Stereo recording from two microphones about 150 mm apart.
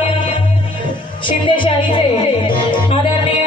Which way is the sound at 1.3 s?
35° left (ahead or behind).